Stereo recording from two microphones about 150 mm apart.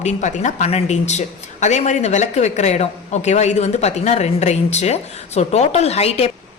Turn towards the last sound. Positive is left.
turn(degrees=45)  # may be behind; listen again after turning